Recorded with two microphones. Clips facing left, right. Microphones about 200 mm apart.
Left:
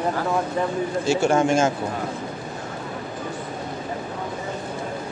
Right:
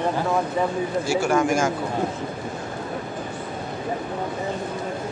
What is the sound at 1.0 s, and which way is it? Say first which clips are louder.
Speech: left 2 dB; 25° left (ahead or behind).